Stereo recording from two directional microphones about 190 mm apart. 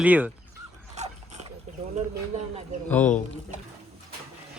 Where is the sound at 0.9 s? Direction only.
35° right (ahead or behind).